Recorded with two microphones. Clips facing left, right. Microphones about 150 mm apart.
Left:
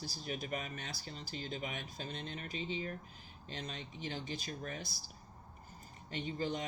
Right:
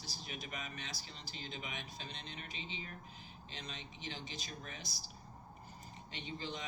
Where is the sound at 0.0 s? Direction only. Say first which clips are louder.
Left 6 dB; 45° left (ahead or behind).